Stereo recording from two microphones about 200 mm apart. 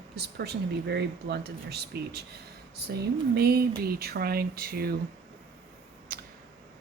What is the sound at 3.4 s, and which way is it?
Speech, 50° right (ahead or behind).